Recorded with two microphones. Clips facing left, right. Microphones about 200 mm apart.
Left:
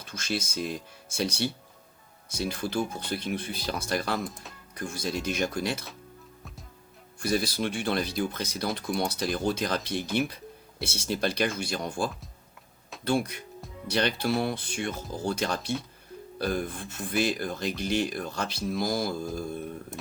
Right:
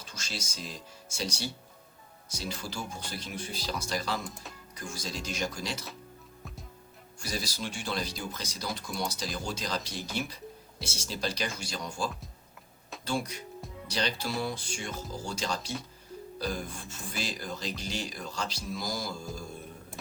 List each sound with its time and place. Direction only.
0.0 s speech: 55° left (ahead or behind)
4.2 s speech: centre (ahead or behind)
4.7 s speech: 55° left (ahead or behind)
7.2 s speech: 55° left (ahead or behind)